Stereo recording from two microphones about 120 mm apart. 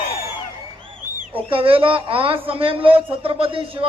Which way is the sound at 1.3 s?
50° right (ahead or behind).